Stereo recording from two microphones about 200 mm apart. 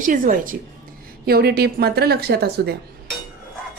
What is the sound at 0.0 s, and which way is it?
A woman's voice, 40° right (ahead or behind).